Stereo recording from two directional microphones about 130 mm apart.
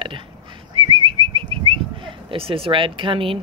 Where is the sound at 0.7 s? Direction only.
40° right (ahead or behind).